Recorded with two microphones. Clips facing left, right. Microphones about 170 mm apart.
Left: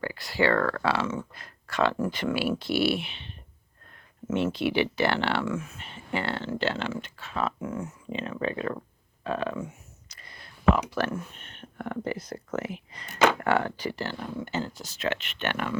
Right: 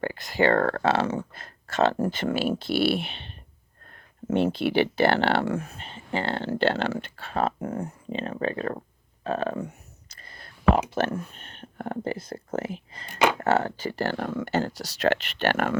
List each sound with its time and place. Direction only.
0.2 s speech: 20° right (ahead or behind)
0.4 s speech: 50° right (ahead or behind)
0.9 s speech: 35° right (ahead or behind)
3.9 s a sound: 35° right (ahead or behind)
4.8 s speech: 50° right (ahead or behind)
5.5 s speech: 35° right (ahead or behind)
6.3 s speech: 55° right (ahead or behind)
8.1 s speech: 40° right (ahead or behind)
10.2 s whispering: 45° right (ahead or behind)
10.8 s speech: 25° right (ahead or behind)
11.3 s speech: 40° right (ahead or behind)
13.9 s speech: 55° right (ahead or behind); by 15.1 s 75° right (ahead or behind)
15.1 s speech: 35° right (ahead or behind)